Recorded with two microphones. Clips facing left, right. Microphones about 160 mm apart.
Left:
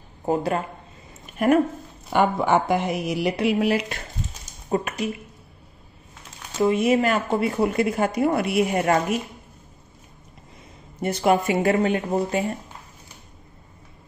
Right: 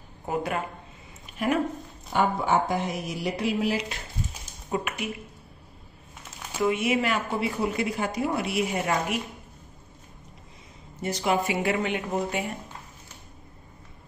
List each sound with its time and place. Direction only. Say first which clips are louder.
0.2 s speech: left 6 dB; 35° left (ahead or behind)
1.2 s a sound: left 7 dB; 50° left (ahead or behind)
2.1 s speech: left 4 dB; 70° left (ahead or behind)
4.6 s speech: left 5 dB; 35° left (ahead or behind)
6.6 s speech: left 5 dB; 35° left (ahead or behind)
11.0 s speech: left 5 dB; 55° left (ahead or behind); by 12.5 s 35° left (ahead or behind)